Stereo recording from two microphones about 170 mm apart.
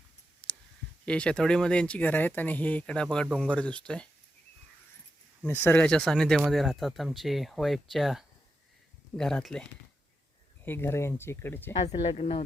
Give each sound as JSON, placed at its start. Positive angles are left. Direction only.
{"t": 0.4, "sound": "clicking", "side_deg": 10}
{"t": 1.0, "sound": "speech", "side_deg": 5}
{"t": 5.4, "sound": "speech", "side_deg": 10}
{"t": 10.7, "sound": "speech", "side_deg": 15}
{"t": 11.7, "sound": "speech", "side_deg": 40}